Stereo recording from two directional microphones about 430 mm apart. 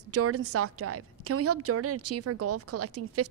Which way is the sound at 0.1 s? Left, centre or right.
Right.